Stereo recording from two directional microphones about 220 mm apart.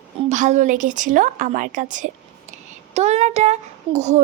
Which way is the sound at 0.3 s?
30° right (ahead or behind).